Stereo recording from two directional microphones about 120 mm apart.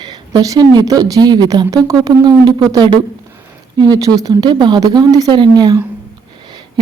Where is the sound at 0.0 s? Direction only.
35° right (ahead or behind).